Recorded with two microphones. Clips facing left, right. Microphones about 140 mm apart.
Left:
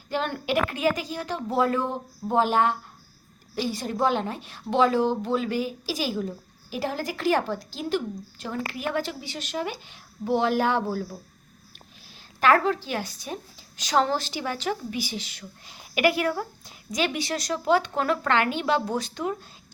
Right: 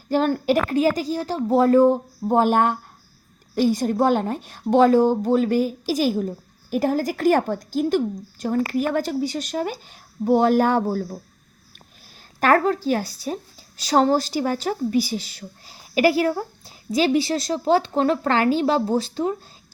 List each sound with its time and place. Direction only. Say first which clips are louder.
0.1 s a woman's voice: right 7 dB; 40° right (ahead or behind)
12.4 s speech: right 3 dB; 45° right (ahead or behind)